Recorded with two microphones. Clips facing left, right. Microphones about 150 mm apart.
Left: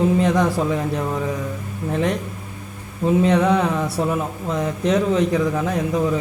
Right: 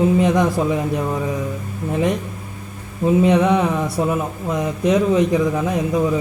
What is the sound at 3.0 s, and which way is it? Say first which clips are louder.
Speech: right 2 dB; 10° right (ahead or behind).